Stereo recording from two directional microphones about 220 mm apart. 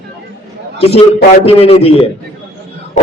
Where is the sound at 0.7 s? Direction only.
25° left (ahead or behind).